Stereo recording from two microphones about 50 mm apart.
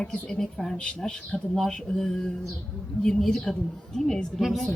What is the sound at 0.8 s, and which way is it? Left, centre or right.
Speech, left.